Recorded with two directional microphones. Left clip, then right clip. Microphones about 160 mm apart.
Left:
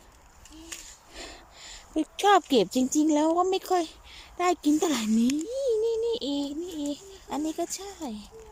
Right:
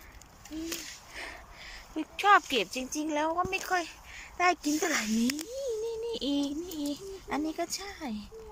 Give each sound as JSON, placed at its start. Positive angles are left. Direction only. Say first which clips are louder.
{"t": 1.1, "sound": "speech", "louder": "left 1 dB", "side_deg": 25}